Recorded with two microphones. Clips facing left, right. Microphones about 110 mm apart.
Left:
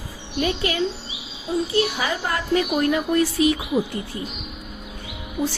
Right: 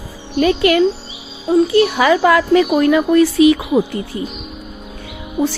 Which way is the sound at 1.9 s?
90° right.